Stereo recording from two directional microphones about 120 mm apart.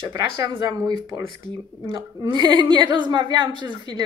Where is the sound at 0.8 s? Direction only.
35° right (ahead or behind).